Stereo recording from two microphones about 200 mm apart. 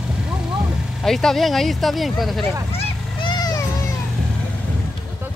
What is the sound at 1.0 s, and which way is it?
Speech, centre (ahead or behind).